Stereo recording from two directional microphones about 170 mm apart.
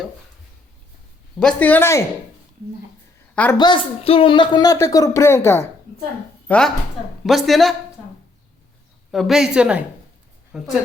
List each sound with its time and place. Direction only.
1.4 s speech: 5° left (ahead or behind)
3.6 s speech: 30° left (ahead or behind)
6.5 s a woman's voice: 5° left (ahead or behind)
9.1 s a woman's voice: centre (ahead or behind)